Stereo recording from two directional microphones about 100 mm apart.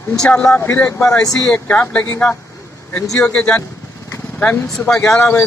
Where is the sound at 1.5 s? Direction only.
15° left (ahead or behind).